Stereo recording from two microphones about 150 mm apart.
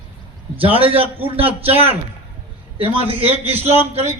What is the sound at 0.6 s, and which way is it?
A man's voice, 40° right (ahead or behind).